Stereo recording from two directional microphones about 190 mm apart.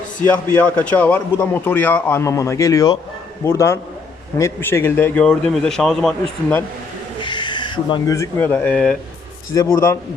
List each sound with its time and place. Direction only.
0.5 s a man's voice: 5° left (ahead or behind)
7.2 s a man's voice: 25° left (ahead or behind)